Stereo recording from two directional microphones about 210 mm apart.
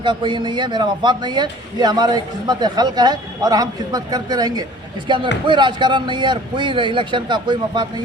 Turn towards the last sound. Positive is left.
turn(degrees=-20)  # may be behind; listen again after turning